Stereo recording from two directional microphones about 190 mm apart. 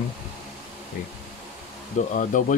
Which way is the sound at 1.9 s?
45° left (ahead or behind).